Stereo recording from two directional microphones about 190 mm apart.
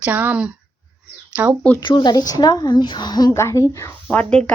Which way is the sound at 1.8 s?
25° left (ahead or behind).